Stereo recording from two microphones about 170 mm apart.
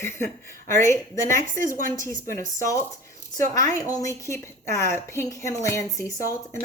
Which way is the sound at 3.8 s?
20° left (ahead or behind).